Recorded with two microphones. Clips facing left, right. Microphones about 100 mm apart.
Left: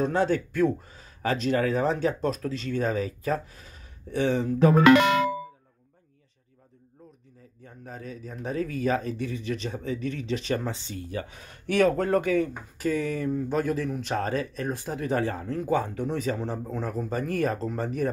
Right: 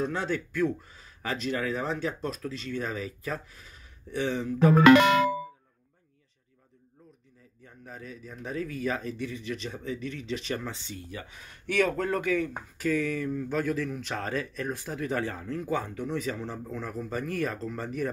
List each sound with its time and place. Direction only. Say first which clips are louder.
0.0 s speech: left 6 dB; 40° left (ahead or behind)
7.6 s speech: left 4 dB; 35° left (ahead or behind)